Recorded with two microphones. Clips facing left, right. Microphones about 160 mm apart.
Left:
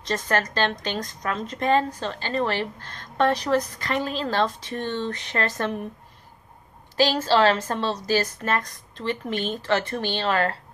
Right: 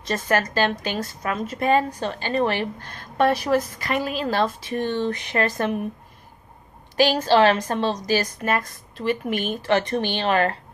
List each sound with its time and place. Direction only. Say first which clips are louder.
0.0 s a woman's voice: right 2 dB; 10° right (ahead or behind)
7.0 s a woman's voice: right 2 dB; 15° right (ahead or behind)